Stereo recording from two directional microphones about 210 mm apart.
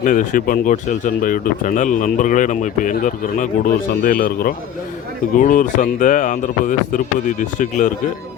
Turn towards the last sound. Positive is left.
turn(degrees=35)  # may be behind; listen again after turning